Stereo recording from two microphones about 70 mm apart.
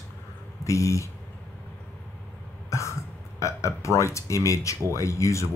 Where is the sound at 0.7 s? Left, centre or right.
Left.